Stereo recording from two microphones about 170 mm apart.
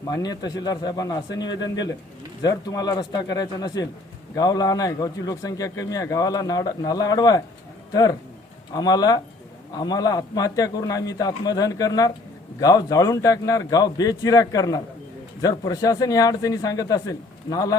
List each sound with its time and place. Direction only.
0.1 s a man's voice: 25° left (ahead or behind)
8.7 s a man's voice: 20° left (ahead or behind)